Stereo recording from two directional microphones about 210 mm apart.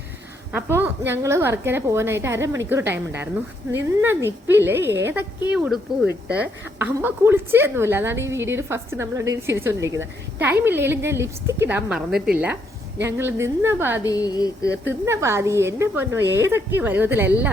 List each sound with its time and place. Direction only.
0.5 s a woman's voice: 10° right (ahead or behind)
14.0 s a sound: 15° left (ahead or behind)
14.8 s a woman's voice: 15° right (ahead or behind)